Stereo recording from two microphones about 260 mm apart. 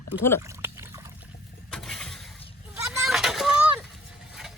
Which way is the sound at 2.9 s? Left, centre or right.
Centre.